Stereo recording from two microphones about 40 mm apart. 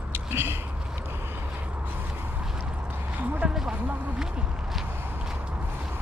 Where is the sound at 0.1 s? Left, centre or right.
Right.